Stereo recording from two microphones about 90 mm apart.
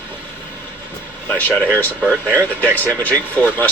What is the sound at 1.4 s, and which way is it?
Speech, 20° left (ahead or behind).